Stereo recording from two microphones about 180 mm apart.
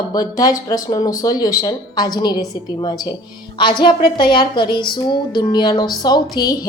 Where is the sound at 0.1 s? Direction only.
20° left (ahead or behind).